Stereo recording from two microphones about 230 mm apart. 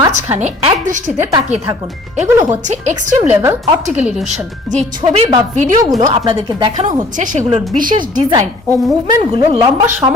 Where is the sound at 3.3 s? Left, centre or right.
Centre.